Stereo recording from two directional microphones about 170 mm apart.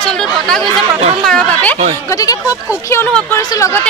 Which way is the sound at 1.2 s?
5° left (ahead or behind).